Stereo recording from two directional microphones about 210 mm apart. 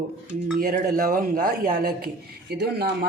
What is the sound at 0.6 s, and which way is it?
A man's voice, 45° right (ahead or behind).